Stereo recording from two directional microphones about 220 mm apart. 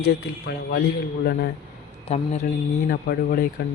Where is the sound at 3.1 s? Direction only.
45° left (ahead or behind).